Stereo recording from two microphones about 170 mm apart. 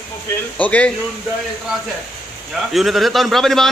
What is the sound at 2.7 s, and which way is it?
Speech, centre (ahead or behind).